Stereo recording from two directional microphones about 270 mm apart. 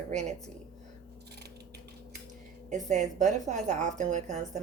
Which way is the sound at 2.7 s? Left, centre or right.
Right.